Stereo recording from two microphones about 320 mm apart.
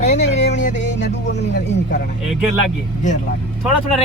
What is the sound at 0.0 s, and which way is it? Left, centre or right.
Music, left.